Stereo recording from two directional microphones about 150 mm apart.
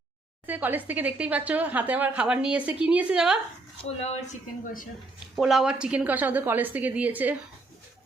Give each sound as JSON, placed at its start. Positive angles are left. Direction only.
{"t": 0.4, "sound": "speech", "side_deg": -10}
{"t": 3.8, "sound": "speech", "side_deg": 45}
{"t": 4.6, "sound": "speech", "side_deg": 65}
{"t": 5.4, "sound": "speech", "side_deg": -5}